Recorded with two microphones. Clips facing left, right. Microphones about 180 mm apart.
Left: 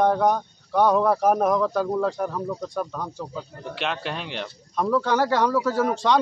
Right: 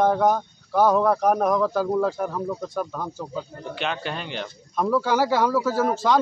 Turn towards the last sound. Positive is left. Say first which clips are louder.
# even
turn(degrees=-5)  # may be behind; listen again after turning